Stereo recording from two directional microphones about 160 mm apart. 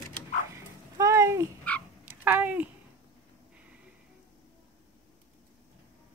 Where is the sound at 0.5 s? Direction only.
20° right (ahead or behind).